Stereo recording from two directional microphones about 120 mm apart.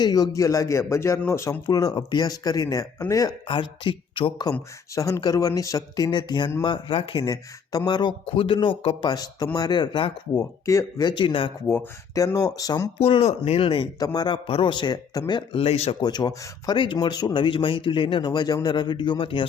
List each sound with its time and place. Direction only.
0.0 s speech: 35° left (ahead or behind)
3.4 s speech: 45° left (ahead or behind)
4.9 s speech: 25° left (ahead or behind); by 7.3 s 45° left (ahead or behind)
7.3 s speech: 30° left (ahead or behind)
10.7 s speech: 25° left (ahead or behind)
11.0 s speech: 40° left (ahead or behind)
11.7 s speech: 30° left (ahead or behind)
13.0 s speech: 55° left (ahead or behind)
14.0 s speech: 35° left (ahead or behind)
14.4 s speech: 45° left (ahead or behind)
16.0 s speech: 35° left (ahead or behind)